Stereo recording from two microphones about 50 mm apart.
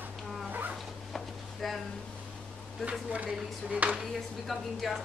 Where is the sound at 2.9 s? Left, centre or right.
Right.